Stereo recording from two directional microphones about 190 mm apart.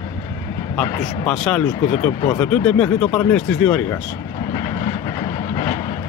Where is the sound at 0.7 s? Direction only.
5° left (ahead or behind).